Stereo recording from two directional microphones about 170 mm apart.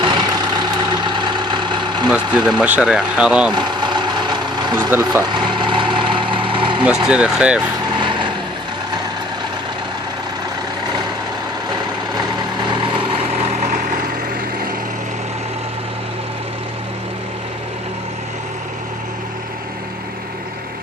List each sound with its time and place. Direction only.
0.0 s vehicle: 25° right (ahead or behind)
2.0 s speech: 5° right (ahead or behind)
3.5 s vehicle: 25° right (ahead or behind)
4.9 s speech: 15° right (ahead or behind)
5.2 s engine: 25° right (ahead or behind)
6.8 s speech: 5° right (ahead or behind)
8.0 s vehicle: 30° right (ahead or behind)
12.6 s vehicle: 25° right (ahead or behind)
13.4 s vehicle: 45° right (ahead or behind)